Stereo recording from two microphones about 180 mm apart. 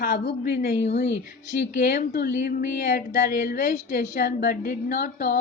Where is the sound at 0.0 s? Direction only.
60° left (ahead or behind).